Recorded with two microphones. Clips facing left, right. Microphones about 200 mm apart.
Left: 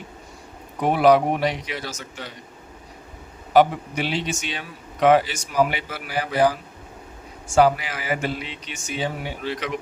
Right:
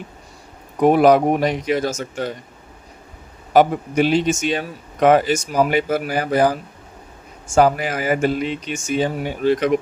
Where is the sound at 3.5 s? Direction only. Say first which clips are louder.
Right 2 dB; 45° right (ahead or behind).